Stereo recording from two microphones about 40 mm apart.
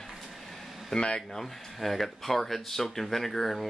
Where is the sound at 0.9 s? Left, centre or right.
Left.